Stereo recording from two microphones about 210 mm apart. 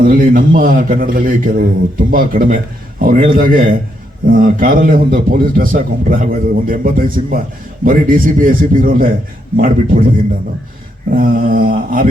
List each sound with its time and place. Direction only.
0.0 s a man's voice: 40° right (ahead or behind)
11.1 s a man's voice: 40° right (ahead or behind)